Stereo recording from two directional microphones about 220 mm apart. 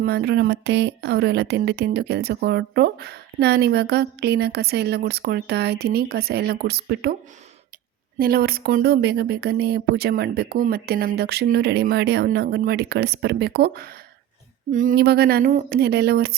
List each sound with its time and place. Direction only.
0.0 s speech: 45° right (ahead or behind)
8.2 s speech: 45° right (ahead or behind)